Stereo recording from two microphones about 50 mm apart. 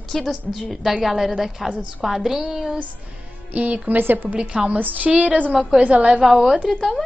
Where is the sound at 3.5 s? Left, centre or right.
Right.